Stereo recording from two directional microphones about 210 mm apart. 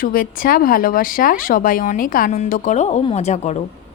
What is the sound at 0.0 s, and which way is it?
Speech, 45° left (ahead or behind).